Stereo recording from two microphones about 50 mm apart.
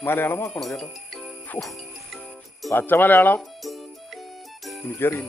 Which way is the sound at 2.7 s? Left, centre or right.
Left.